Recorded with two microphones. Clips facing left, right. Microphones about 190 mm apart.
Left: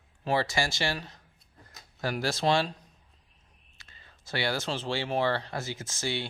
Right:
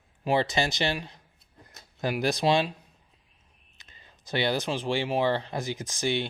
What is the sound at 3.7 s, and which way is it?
Speech, 20° right (ahead or behind).